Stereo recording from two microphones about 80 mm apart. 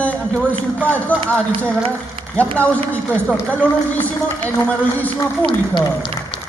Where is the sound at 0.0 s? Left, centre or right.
Centre.